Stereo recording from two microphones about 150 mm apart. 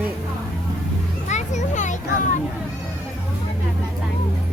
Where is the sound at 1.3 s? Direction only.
50° left (ahead or behind).